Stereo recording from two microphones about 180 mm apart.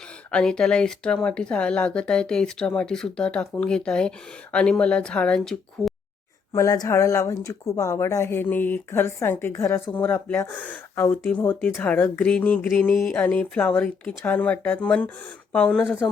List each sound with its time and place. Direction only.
0.3 s speech: 5° left (ahead or behind)
6.5 s speech: 20° left (ahead or behind)